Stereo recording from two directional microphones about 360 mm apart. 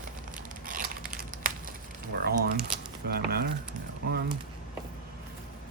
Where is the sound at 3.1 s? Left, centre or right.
Right.